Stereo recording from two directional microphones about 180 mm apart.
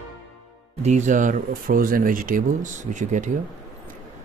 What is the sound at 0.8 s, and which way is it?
Speech, 40° right (ahead or behind).